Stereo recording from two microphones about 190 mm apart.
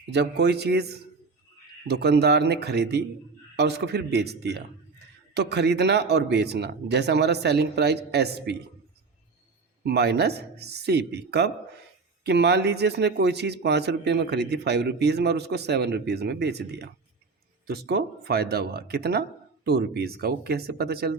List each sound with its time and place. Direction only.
0.0 s a man's voice: 65° right (ahead or behind)
9.8 s a man's voice: 60° right (ahead or behind)